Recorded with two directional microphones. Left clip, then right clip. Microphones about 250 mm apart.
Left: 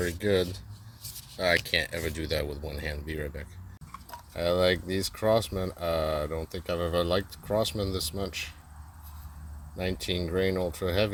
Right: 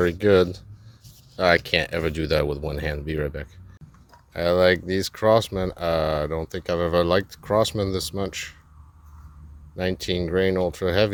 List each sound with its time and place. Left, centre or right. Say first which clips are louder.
0.0 s speech: right 9 dB; right
9.7 s speech: right 6 dB; centre